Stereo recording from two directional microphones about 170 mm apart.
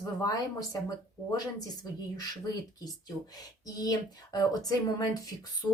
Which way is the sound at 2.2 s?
20° left (ahead or behind).